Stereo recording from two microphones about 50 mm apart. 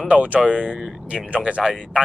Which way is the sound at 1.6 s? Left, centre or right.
Centre.